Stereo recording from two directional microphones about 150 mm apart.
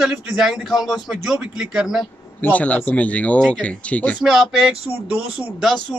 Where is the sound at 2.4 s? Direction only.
10° left (ahead or behind).